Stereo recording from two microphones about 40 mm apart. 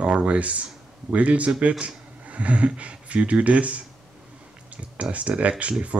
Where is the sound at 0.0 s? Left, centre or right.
Right.